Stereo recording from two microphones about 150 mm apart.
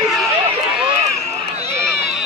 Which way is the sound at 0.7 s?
5° right (ahead or behind).